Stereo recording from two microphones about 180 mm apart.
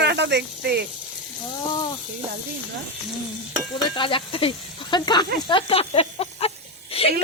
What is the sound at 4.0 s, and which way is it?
Speech, 30° left (ahead or behind).